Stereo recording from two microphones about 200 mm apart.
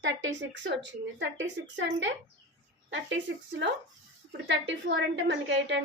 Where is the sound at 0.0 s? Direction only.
65° right (ahead or behind).